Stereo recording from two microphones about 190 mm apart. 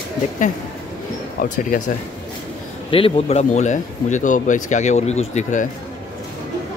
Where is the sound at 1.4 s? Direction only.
45° left (ahead or behind).